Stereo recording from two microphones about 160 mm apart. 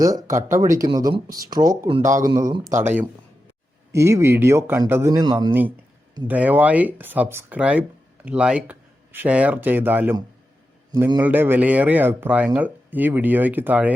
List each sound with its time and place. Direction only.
0.0 s speech: 20° right (ahead or behind)
5.3 s speech: 30° right (ahead or behind)
6.2 s speech: 10° right (ahead or behind)
11.2 s speech: 10° right (ahead or behind)